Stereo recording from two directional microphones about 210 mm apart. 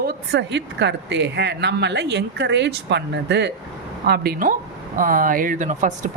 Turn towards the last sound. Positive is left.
turn(degrees=-35)  # may be behind; listen again after turning